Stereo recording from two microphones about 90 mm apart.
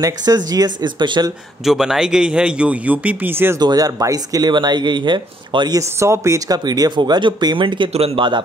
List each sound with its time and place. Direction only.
0.0 s speech: 45° right (ahead or behind)
1.6 s a man's voice: 5° right (ahead or behind); by 3.5 s 25° right (ahead or behind)
3.5 s speech: 45° right (ahead or behind)
5.8 s speech: 30° right (ahead or behind)
6.5 s speech: 45° right (ahead or behind); by 8.4 s 65° right (ahead or behind)